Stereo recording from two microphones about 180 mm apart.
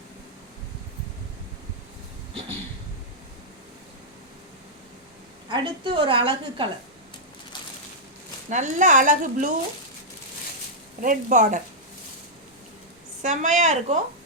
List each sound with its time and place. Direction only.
5.5 s a woman's voice: 25° right (ahead or behind)
8.4 s speech: 40° right (ahead or behind)
11.0 s speech: 45° right (ahead or behind)
13.2 s a woman's voice: 40° right (ahead or behind)